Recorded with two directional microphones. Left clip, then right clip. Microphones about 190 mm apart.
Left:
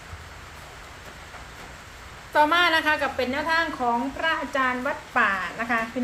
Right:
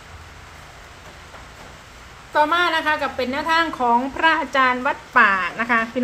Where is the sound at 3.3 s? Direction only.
25° right (ahead or behind).